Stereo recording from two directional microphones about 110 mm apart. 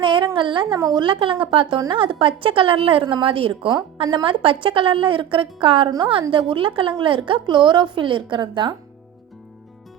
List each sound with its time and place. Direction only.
0.0 s a sound: 50° right (ahead or behind)
0.3 s a woman's voice: 50° right (ahead or behind)
0.8 s a woman's voice: 35° right (ahead or behind)
1.0 s a woman's voice: 50° right (ahead or behind)